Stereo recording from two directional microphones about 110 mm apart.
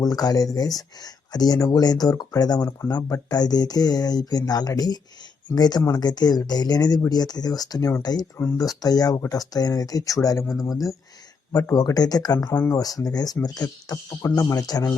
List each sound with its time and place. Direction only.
0.0 s speech: 35° left (ahead or behind)
8.4 s speech: 20° left (ahead or behind)
8.6 s speech: 35° left (ahead or behind)
12.5 s speech: 20° left (ahead or behind)
12.8 s speech: 35° left (ahead or behind)